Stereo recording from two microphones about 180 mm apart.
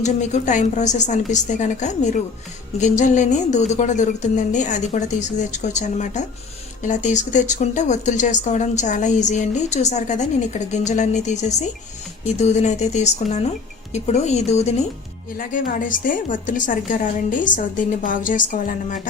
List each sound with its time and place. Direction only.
0.0 s speech: 40° left (ahead or behind)
15.4 s a woman's voice: 50° left (ahead or behind)